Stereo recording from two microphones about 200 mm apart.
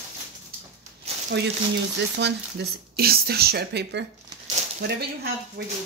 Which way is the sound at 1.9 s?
60° right (ahead or behind).